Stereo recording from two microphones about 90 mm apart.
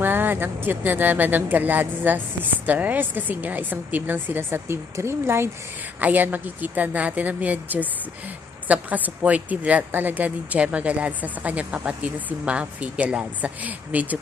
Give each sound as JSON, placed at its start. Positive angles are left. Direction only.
{"t": 0.0, "sound": "speech", "side_deg": -25}
{"t": 6.0, "sound": "a woman's voice", "side_deg": -20}